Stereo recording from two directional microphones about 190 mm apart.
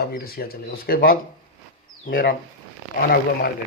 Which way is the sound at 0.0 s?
55° left (ahead or behind).